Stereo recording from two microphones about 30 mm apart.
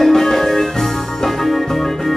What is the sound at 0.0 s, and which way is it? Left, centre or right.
Music, centre.